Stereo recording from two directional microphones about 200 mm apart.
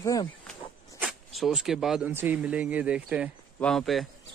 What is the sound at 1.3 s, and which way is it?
Speech, centre (ahead or behind).